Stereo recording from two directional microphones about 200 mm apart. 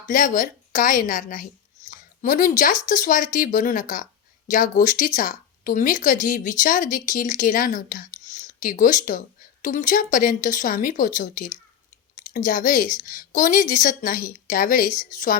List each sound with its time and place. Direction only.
0.1 s a woman's voice: 40° left (ahead or behind)